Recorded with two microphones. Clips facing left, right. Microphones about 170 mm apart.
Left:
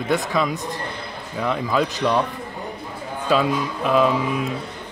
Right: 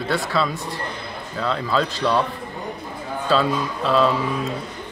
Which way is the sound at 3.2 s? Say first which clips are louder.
Even; 15° left (ahead or behind).